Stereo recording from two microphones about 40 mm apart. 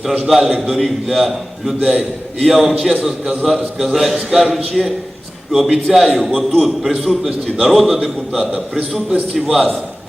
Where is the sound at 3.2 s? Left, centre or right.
Centre.